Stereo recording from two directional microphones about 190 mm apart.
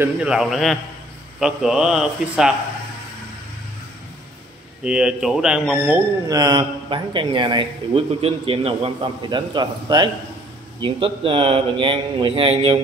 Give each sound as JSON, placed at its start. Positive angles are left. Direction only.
{"t": 0.0, "sound": "speech", "side_deg": -5}
{"t": 4.8, "sound": "speech", "side_deg": -5}
{"t": 6.2, "sound": "a man's voice", "side_deg": -20}